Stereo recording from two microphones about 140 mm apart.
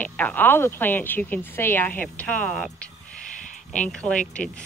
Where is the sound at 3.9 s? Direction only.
5° left (ahead or behind).